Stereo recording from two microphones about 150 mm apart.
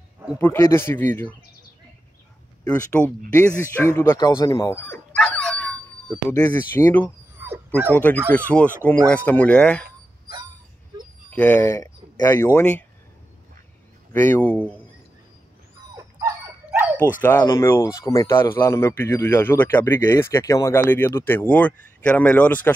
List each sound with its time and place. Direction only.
0.4 s speech: 15° left (ahead or behind)
2.7 s speech: 10° left (ahead or behind)
4.5 s dog: 20° left (ahead or behind)
6.3 s speech: 15° left (ahead or behind)
7.3 s dog: 15° right (ahead or behind)
7.9 s speech: 10° left (ahead or behind)
11.2 s speech: 15° left (ahead or behind)
14.1 s speech: 15° left (ahead or behind)
16.0 s dog: 20° right (ahead or behind)
17.2 s speech: 15° left (ahead or behind)